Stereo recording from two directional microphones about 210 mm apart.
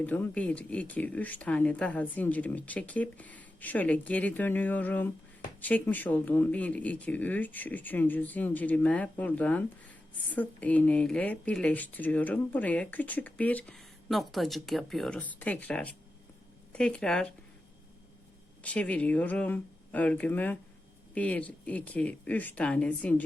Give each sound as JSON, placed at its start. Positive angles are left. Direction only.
{"t": 0.0, "sound": "speech", "side_deg": 5}
{"t": 18.6, "sound": "speech", "side_deg": 5}